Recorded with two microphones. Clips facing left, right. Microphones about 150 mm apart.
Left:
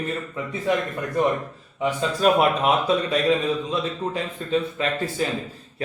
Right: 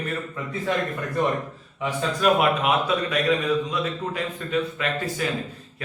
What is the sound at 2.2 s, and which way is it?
Speech, 35° left (ahead or behind).